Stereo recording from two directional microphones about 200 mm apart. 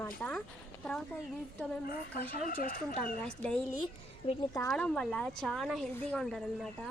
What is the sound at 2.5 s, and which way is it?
Speech, 45° left (ahead or behind).